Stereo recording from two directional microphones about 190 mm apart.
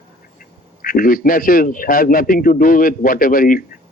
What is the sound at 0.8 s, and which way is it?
A man's voice, 50° left (ahead or behind).